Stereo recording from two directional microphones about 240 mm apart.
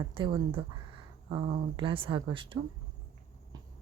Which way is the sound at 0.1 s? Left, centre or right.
Right.